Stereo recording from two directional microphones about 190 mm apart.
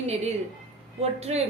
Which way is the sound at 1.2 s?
35° right (ahead or behind).